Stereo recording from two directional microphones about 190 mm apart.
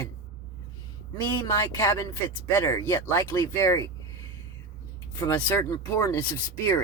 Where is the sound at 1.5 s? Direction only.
15° left (ahead or behind).